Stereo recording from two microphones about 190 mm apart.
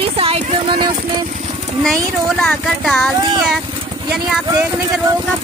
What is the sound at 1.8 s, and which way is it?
Speech, centre (ahead or behind).